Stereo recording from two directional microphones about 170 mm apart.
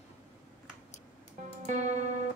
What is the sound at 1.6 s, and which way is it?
Music, 45° right (ahead or behind).